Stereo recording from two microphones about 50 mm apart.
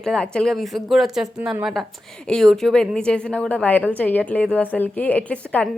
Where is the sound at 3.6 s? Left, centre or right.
Left.